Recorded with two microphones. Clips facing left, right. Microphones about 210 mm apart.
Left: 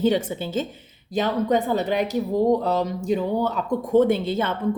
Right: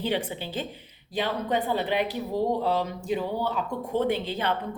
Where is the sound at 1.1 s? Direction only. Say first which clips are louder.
Left 6 dB; 45° left (ahead or behind).